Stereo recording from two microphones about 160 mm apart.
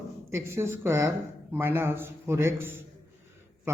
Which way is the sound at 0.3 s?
15° right (ahead or behind).